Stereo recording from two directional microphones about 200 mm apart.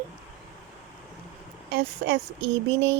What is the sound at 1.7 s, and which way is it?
Speech, 60° right (ahead or behind).